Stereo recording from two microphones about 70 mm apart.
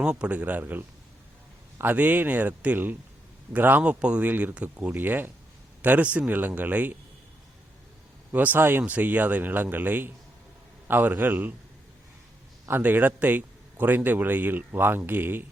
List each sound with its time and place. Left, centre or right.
0.0 s a man's voice: centre
8.3 s a man's voice: right
12.6 s a man's voice: right